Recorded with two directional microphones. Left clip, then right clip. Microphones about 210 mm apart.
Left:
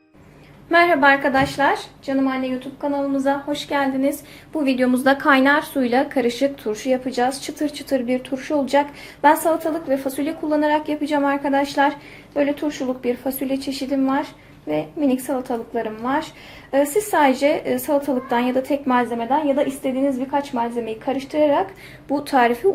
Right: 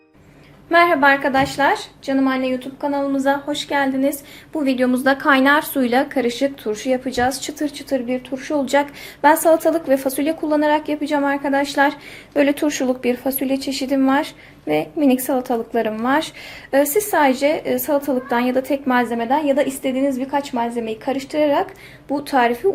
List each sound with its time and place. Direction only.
0.7 s a woman's voice: 5° right (ahead or behind)
12.3 s speech: 30° right (ahead or behind)
16.7 s a woman's voice: 15° right (ahead or behind); by 22.6 s centre (ahead or behind)